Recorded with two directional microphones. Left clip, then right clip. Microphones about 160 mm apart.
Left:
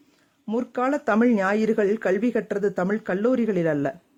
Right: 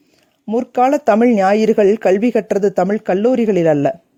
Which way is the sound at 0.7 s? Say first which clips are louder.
Right 10 dB; 45° right (ahead or behind).